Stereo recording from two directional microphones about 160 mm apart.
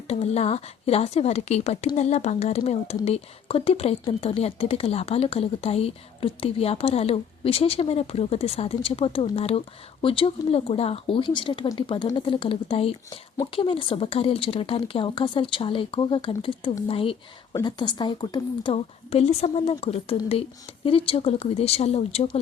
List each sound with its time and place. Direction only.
0.1 s speech: 40° left (ahead or behind)